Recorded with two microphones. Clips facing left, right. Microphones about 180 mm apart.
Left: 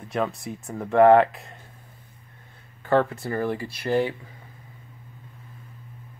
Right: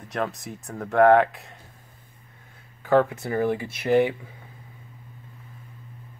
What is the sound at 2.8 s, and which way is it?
Speech, 10° right (ahead or behind).